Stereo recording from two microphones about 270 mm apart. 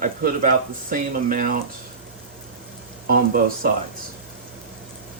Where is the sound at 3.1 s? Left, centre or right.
Right.